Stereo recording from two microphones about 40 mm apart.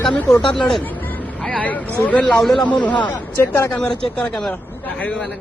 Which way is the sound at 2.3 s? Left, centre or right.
Centre.